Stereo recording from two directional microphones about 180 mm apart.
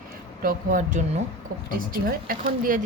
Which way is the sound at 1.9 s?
50° right (ahead or behind).